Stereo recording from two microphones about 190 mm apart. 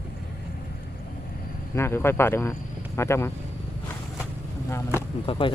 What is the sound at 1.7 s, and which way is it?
Speech, 15° left (ahead or behind).